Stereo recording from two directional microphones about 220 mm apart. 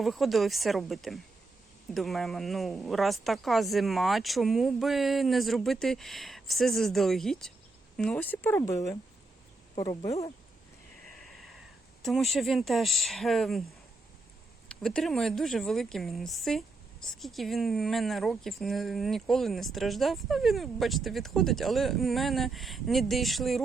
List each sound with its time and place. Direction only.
0.0 s a woman's voice: centre (ahead or behind)
9.7 s speech: 20° left (ahead or behind)
10.1 s speech: 30° left (ahead or behind)
12.0 s a woman's voice: centre (ahead or behind)
14.7 s a woman's voice: 5° left (ahead or behind)